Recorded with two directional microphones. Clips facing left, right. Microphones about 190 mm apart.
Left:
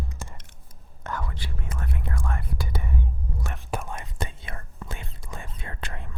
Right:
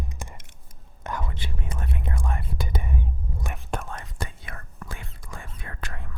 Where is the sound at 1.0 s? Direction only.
20° right (ahead or behind).